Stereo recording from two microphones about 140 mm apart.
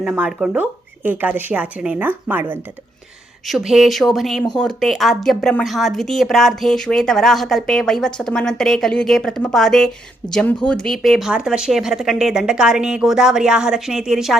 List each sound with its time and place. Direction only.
0.0 s speech: 5° right (ahead or behind)
3.4 s speech: centre (ahead or behind)